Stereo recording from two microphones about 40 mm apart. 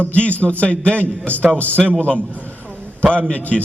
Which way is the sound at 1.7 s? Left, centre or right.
Right.